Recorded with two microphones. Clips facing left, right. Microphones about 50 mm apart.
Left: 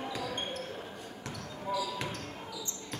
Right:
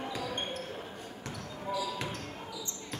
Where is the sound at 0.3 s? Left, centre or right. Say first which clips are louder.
Right 1 dB; centre.